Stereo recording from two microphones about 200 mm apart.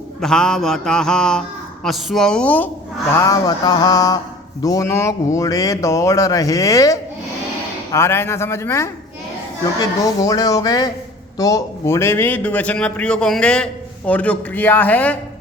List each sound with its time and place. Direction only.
0.2 s a man's voice: 5° left (ahead or behind)
3.2 s a man's voice: 15° left (ahead or behind)